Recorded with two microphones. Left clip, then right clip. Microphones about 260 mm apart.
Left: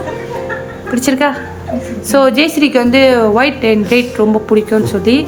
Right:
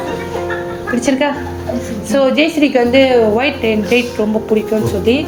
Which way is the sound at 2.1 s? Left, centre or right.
Centre.